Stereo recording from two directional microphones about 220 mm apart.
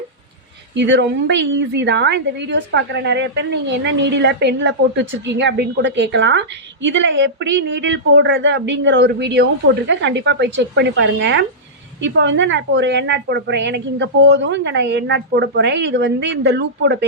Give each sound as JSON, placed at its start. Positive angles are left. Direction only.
{"t": 0.8, "sound": "a woman's voice", "side_deg": -55}